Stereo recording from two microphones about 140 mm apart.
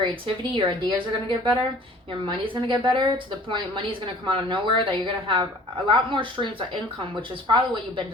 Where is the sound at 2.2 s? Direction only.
35° right (ahead or behind).